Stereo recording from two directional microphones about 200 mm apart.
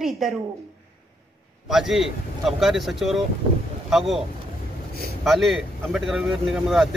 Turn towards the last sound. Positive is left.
turn(degrees=0)  # may be behind; listen again after turning